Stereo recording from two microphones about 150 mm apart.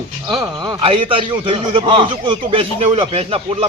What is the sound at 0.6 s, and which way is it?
A man's voice, 30° right (ahead or behind).